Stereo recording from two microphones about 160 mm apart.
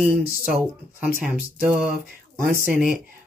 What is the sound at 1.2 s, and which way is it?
Speech, 10° right (ahead or behind).